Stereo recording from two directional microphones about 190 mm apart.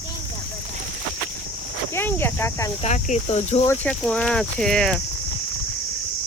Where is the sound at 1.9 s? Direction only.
10° left (ahead or behind).